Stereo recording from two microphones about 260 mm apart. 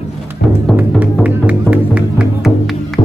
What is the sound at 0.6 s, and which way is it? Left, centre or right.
Music, centre.